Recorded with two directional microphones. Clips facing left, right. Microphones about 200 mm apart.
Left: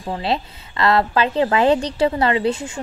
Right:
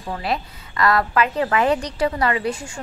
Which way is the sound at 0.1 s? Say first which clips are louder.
Left 3 dB; 25° left (ahead or behind).